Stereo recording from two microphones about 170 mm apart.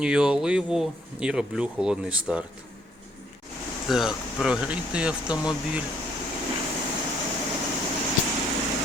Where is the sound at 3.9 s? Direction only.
Centre (ahead or behind).